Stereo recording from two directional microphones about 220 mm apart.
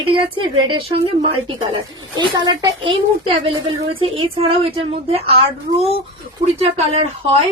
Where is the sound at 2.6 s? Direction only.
20° right (ahead or behind).